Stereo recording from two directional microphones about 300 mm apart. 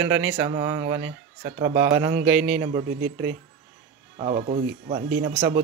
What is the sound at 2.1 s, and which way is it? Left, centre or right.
Speech, right.